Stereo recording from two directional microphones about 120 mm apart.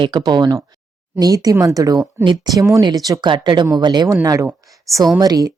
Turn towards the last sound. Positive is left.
turn(degrees=-30)  # may be behind; listen again after turning